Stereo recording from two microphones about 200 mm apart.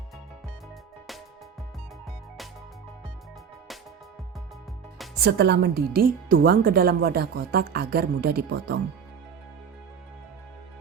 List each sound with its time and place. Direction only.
5.2 s speech: 55° right (ahead or behind)